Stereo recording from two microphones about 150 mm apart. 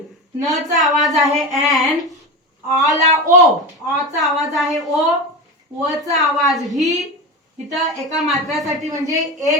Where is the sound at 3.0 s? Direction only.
50° right (ahead or behind).